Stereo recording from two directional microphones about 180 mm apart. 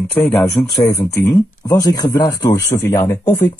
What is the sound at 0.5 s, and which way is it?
Speech, 20° left (ahead or behind).